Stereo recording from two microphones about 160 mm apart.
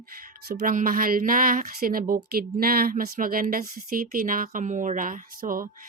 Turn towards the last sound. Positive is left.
turn(degrees=-60)  # may be behind; listen again after turning